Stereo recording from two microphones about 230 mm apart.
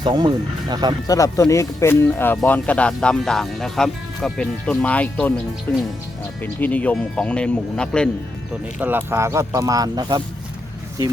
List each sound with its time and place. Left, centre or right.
0.0 s speech: centre
1.0 s speech: centre
8.8 s speech: centre